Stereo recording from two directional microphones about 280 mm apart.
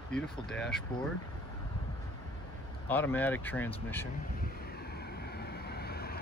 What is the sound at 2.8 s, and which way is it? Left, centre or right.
Speech, centre.